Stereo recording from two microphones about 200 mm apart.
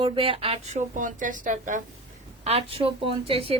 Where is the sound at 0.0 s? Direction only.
25° right (ahead or behind).